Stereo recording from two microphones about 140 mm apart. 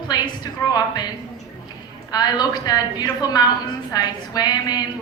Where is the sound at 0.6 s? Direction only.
25° left (ahead or behind).